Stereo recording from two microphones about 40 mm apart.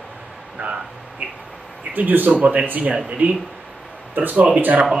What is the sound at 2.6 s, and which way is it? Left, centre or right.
Speech, right.